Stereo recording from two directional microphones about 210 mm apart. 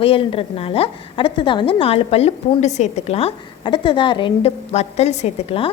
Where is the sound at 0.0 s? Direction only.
25° left (ahead or behind).